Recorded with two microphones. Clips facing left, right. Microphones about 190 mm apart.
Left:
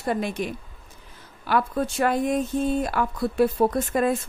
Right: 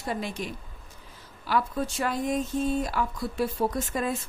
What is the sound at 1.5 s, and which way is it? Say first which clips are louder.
Speech: left 4 dB; 60° left (ahead or behind).